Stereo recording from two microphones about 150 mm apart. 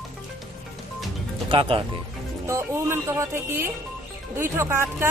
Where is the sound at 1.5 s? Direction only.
35° right (ahead or behind).